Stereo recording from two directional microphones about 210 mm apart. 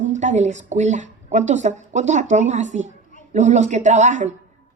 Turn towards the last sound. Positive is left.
turn(degrees=-35)  # may be behind; listen again after turning